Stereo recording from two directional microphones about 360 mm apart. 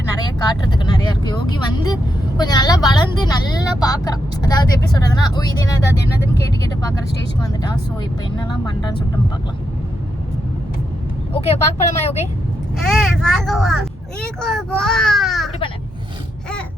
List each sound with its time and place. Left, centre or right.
0.4 s speech: centre
6.0 s speech: left
8.4 s speech: centre
11.3 s speech: centre
12.9 s speech: centre